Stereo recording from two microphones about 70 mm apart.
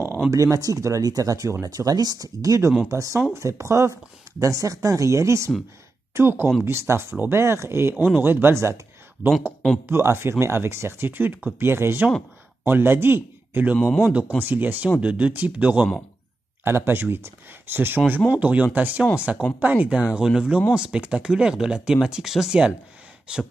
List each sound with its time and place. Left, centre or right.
0.3 s speech: right
6.1 s speech: right
9.8 s speech: right; by 15.9 s centre
16.6 s speech: right; by 23.4 s centre